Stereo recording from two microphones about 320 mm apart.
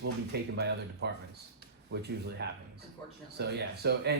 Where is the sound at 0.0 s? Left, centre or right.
Right.